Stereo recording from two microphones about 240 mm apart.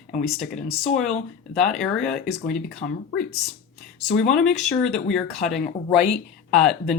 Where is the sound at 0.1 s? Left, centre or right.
Left.